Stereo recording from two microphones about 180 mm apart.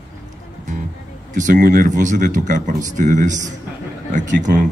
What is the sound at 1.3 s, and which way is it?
A man's voice, 45° right (ahead or behind).